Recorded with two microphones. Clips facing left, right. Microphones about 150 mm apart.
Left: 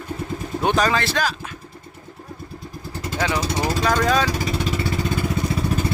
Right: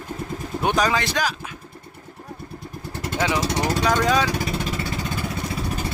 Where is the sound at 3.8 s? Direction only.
15° right (ahead or behind).